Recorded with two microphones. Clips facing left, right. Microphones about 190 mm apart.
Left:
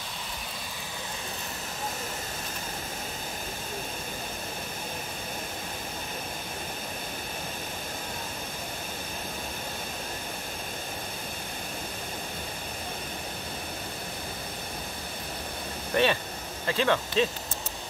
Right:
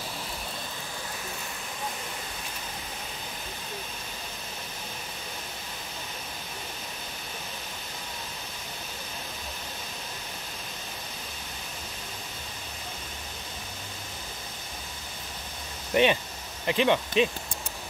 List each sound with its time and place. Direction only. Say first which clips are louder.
15.9 s vehicle: right 2 dB; 15° right (ahead or behind)
16.6 s speech: right 2 dB; 15° right (ahead or behind)